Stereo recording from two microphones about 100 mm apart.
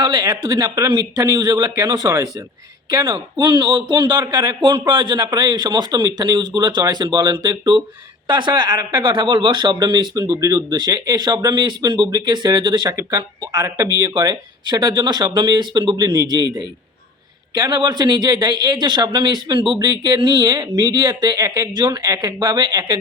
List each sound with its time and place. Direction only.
0.0 s a man's voice: 45° right (ahead or behind)
8.3 s a man's voice: 50° right (ahead or behind)
13.0 s a man's voice: 35° right (ahead or behind)